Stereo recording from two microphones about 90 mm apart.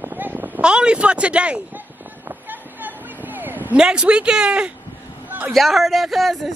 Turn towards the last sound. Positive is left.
turn(degrees=0)  # may be behind; listen again after turning